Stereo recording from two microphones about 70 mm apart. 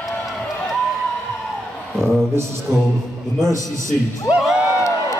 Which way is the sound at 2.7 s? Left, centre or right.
Right.